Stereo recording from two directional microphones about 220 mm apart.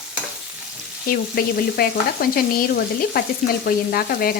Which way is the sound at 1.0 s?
40° left (ahead or behind).